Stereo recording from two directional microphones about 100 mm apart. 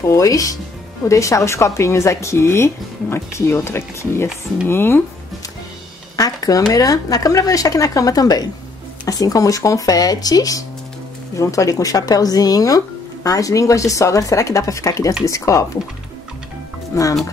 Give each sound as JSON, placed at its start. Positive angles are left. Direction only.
{"t": 0.1, "sound": "a woman's voice", "side_deg": 35}
{"t": 6.1, "sound": "speech", "side_deg": 35}
{"t": 16.9, "sound": "speech", "side_deg": 30}